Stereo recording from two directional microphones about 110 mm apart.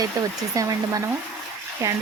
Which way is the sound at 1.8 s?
25° right (ahead or behind).